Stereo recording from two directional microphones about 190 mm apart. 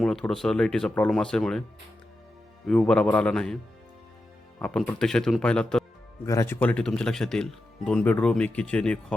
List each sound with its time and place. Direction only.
0.0 s speech: centre (ahead or behind)
2.6 s speech: 5° left (ahead or behind)
4.6 s speech: 5° left (ahead or behind)